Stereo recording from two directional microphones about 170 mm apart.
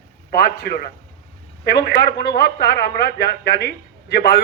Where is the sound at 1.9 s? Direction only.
65° left (ahead or behind).